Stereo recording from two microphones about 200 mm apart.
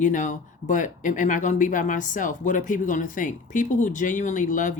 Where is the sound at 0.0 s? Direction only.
40° left (ahead or behind).